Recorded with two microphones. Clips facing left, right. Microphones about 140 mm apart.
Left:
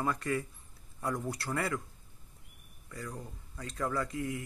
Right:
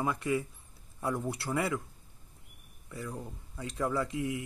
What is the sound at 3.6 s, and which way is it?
Speech, 20° right (ahead or behind).